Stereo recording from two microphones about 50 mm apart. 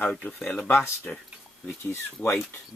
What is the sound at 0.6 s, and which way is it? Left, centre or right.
Speech, left.